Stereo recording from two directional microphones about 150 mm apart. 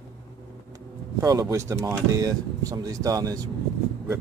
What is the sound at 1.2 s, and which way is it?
Speech, 25° right (ahead or behind).